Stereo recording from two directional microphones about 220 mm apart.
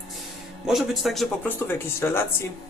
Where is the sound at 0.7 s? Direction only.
Centre (ahead or behind).